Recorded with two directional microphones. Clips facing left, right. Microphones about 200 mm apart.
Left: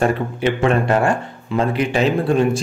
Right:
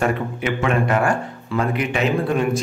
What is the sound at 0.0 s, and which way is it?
Speech, 30° left (ahead or behind).